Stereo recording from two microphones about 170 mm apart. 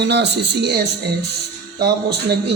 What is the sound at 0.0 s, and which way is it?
Speech, 80° right.